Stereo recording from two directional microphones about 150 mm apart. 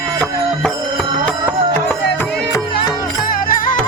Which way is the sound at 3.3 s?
65° left (ahead or behind).